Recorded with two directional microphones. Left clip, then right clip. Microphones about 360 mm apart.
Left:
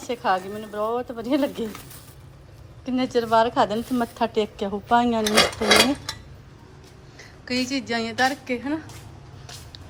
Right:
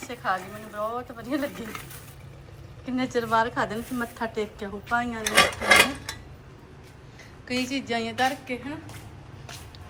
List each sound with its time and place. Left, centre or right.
0.0 s speech: centre
2.8 s speech: centre
5.2 s dishes: left
7.2 s a woman's voice: centre